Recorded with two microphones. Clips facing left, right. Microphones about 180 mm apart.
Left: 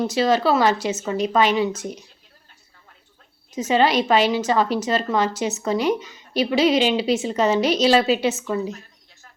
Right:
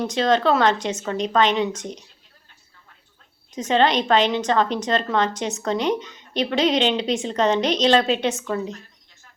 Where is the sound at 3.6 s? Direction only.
5° left (ahead or behind).